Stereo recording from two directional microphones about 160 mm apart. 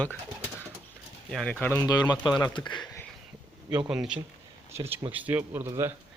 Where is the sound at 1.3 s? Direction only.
5° left (ahead or behind).